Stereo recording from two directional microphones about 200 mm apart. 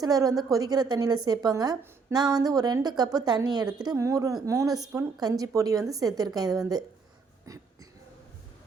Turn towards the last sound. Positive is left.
turn(degrees=-15)  # may be behind; listen again after turning